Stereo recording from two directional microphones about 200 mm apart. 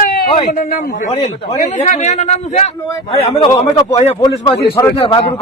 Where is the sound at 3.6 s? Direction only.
10° left (ahead or behind).